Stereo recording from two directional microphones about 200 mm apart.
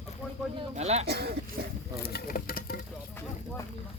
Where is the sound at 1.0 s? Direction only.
55° right (ahead or behind).